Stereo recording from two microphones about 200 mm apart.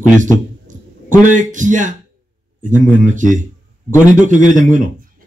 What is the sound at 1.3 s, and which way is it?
Speech, 40° right (ahead or behind).